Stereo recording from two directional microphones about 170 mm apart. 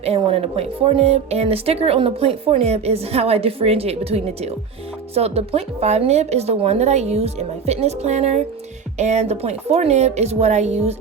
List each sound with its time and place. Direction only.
0.0 s speech: 35° right (ahead or behind)